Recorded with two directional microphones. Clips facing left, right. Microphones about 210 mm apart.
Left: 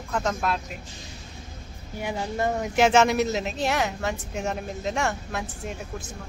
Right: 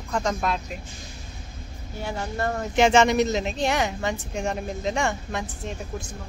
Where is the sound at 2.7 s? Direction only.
5° left (ahead or behind).